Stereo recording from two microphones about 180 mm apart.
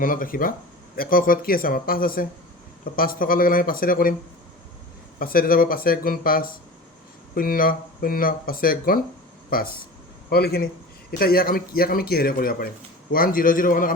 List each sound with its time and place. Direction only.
0.0 s speech: 50° left (ahead or behind)
5.2 s speech: 55° left (ahead or behind)